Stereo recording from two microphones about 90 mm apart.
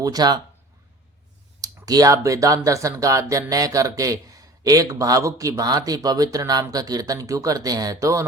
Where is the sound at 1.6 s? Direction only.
45° right (ahead or behind).